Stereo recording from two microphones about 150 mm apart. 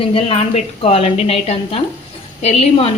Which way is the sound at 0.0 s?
40° left (ahead or behind).